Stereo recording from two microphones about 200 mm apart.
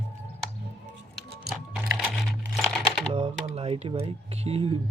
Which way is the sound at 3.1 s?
30° right (ahead or behind).